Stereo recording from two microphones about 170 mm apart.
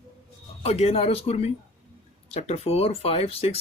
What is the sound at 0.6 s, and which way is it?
Speech, 35° left (ahead or behind).